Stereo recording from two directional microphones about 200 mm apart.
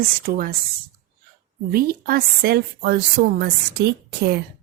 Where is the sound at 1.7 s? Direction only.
50° right (ahead or behind).